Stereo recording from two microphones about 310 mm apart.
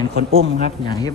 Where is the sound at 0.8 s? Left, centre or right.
Centre.